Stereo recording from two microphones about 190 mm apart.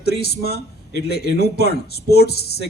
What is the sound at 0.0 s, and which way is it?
A man's voice, 60° left (ahead or behind).